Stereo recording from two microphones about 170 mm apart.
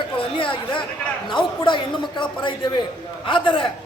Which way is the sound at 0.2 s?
30° left (ahead or behind).